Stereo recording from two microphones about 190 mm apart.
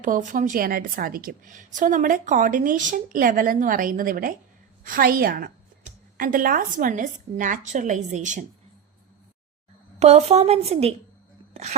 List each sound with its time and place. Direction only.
0.0 s a woman's voice: 45° right (ahead or behind)
10.0 s a woman's voice: 35° right (ahead or behind)